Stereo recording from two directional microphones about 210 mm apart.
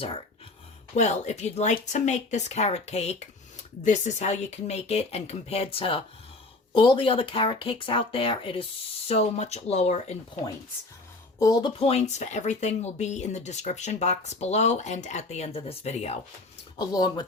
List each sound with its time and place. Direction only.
0.9 s speech: 35° left (ahead or behind)
11.3 s speech: 15° left (ahead or behind)
11.8 s speech: 30° left (ahead or behind)
16.7 s speech: 20° left (ahead or behind)